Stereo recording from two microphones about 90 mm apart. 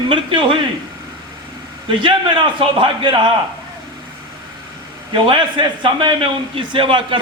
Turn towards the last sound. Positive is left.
turn(degrees=-70)  # may be behind; listen again after turning